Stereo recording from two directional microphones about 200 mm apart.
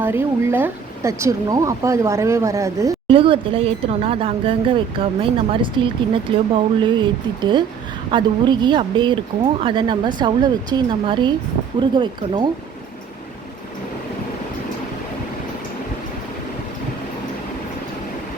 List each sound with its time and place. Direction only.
0.0 s speech: 10° right (ahead or behind)
3.1 s speech: 25° right (ahead or behind)